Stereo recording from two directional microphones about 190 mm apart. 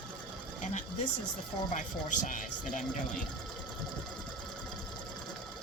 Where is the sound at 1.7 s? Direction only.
40° left (ahead or behind).